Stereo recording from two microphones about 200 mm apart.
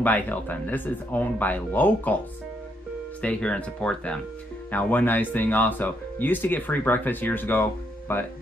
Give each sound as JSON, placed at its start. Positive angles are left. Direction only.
{"t": 0.0, "sound": "speech", "side_deg": 10}
{"t": 3.2, "sound": "speech", "side_deg": 5}